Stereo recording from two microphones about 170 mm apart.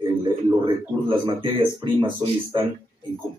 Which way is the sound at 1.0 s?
30° right (ahead or behind).